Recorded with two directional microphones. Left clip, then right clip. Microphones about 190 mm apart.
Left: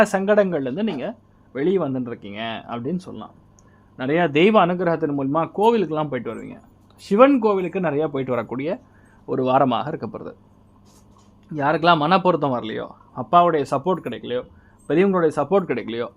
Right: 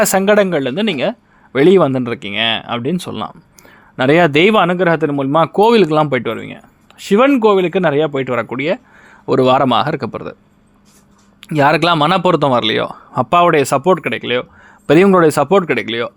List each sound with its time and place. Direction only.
0.0 s speech: 25° right (ahead or behind)
0.4 s speech: 10° right (ahead or behind)
1.5 s speech: 35° right (ahead or behind)
4.3 s speech: 20° right (ahead or behind)
7.4 s speech: 20° right (ahead or behind)
9.2 s speech: 25° right (ahead or behind)
11.4 s speech: 35° right (ahead or behind); by 14.4 s 20° right (ahead or behind)
14.8 s speech: 35° right (ahead or behind); by 16.1 s 5° right (ahead or behind)